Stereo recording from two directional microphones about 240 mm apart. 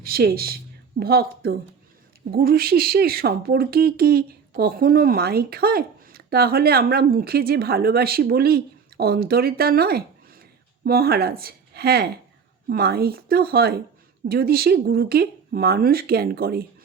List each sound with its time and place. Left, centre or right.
0.0 s speech: right